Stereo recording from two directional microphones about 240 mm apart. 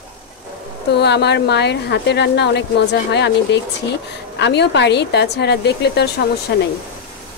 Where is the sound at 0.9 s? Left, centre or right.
Left.